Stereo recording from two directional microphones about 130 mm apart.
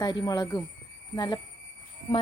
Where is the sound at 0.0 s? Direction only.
35° left (ahead or behind).